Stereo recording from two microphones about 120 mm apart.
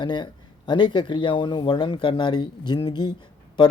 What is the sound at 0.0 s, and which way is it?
Speech, 40° left (ahead or behind).